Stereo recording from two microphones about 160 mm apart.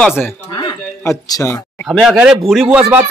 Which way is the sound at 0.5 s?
30° left (ahead or behind).